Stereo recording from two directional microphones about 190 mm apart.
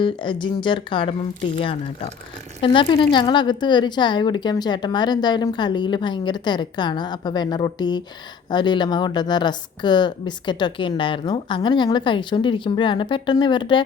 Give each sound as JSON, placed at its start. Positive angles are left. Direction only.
{"t": 0.0, "sound": "a woman's voice", "side_deg": 25}